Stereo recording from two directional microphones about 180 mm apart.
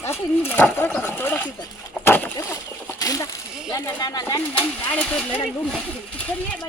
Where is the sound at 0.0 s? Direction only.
15° left (ahead or behind).